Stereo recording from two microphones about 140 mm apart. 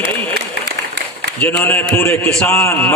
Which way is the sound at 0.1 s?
10° left (ahead or behind).